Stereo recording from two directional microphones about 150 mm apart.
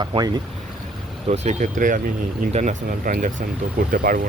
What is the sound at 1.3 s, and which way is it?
Speech, 50° right (ahead or behind).